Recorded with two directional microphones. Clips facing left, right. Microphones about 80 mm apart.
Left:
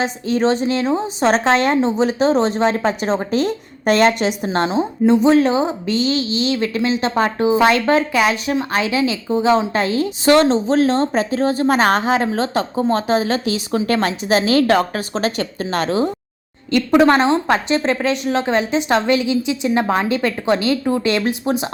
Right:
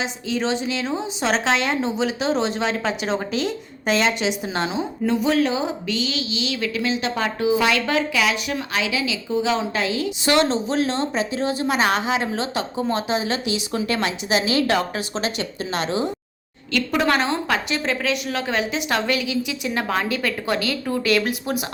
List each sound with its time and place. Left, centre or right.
0.0 s a woman's voice: left
4.4 s a woman's voice: left
16.7 s a woman's voice: left